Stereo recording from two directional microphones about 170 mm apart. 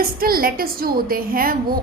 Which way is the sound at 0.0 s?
60° right (ahead or behind).